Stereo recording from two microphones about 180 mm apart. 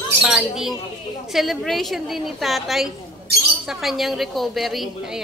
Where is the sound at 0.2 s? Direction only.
5° right (ahead or behind).